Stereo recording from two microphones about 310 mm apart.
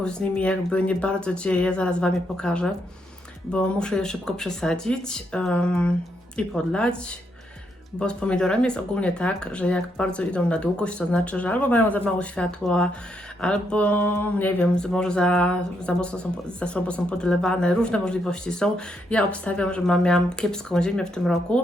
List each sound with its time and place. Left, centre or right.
0.0 s speech: centre